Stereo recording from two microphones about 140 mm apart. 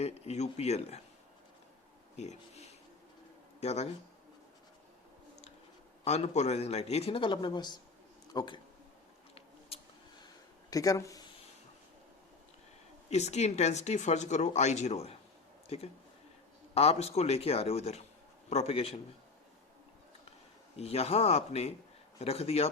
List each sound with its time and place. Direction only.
0.0 s speech: 50° left (ahead or behind)
2.1 s speech: 50° left (ahead or behind)
6.1 s speech: 50° left (ahead or behind); by 8.6 s 30° left (ahead or behind)
9.3 s a sound: 45° left (ahead or behind)
10.7 s speech: 25° left (ahead or behind)
13.1 s speech: 55° left (ahead or behind)
20.7 s speech: 45° left (ahead or behind)